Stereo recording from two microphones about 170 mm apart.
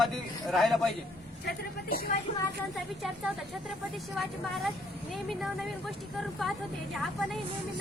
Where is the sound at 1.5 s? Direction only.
60° left (ahead or behind).